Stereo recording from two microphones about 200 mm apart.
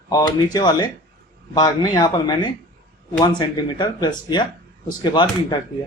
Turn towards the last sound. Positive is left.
turn(degrees=20)  # may be behind; listen again after turning